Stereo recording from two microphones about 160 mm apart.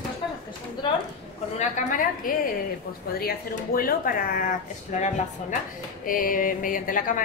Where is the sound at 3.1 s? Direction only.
70° left (ahead or behind).